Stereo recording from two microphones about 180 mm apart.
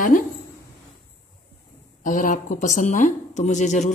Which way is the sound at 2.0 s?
45° left (ahead or behind).